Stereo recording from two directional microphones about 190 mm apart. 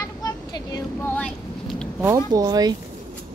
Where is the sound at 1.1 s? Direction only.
5° left (ahead or behind).